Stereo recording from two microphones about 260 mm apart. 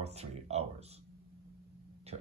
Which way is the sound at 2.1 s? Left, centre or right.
Right.